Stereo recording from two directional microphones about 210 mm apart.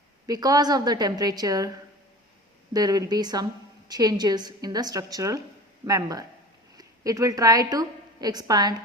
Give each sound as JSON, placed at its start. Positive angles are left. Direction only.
{"t": 0.3, "sound": "a woman's voice", "side_deg": -15}
{"t": 2.7, "sound": "a woman's voice", "side_deg": -20}